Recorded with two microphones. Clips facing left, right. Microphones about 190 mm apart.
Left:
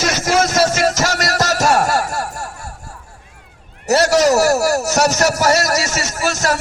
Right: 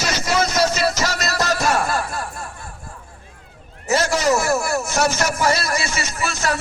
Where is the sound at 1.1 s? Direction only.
90° left.